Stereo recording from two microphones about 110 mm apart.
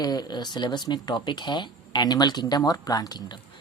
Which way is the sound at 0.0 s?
40° left (ahead or behind).